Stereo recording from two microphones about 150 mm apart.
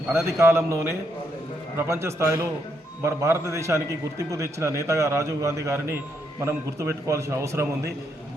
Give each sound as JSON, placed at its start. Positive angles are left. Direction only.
{"t": 0.1, "sound": "a man's voice", "side_deg": -15}